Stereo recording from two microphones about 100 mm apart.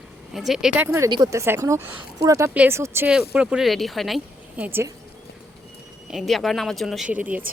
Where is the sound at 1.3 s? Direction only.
25° right (ahead or behind).